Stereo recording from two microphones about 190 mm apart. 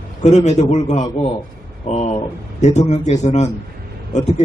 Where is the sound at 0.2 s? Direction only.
35° left (ahead or behind).